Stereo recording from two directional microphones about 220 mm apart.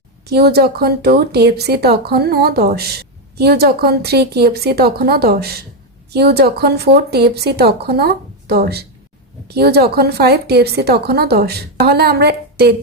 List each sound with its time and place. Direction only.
0.3 s speech: 45° right (ahead or behind)